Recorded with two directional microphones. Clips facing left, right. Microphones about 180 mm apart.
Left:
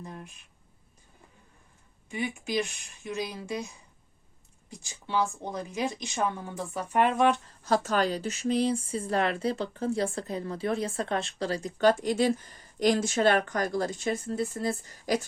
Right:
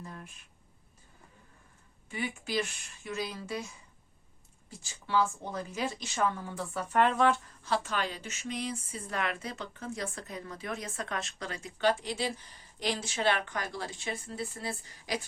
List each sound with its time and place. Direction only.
0.0 s a sound: 20° left (ahead or behind)
2.0 s a woman's voice: 15° left (ahead or behind)
4.7 s a woman's voice: 15° left (ahead or behind)
7.6 s speech: 40° left (ahead or behind)